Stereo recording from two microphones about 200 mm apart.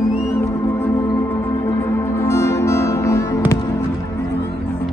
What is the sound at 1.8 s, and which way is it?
Music, 10° left (ahead or behind).